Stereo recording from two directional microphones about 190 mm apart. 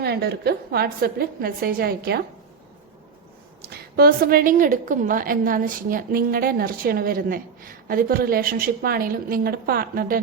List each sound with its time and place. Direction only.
0.0 s a woman's voice: 60° right (ahead or behind)
3.6 s a woman's voice: 55° right (ahead or behind)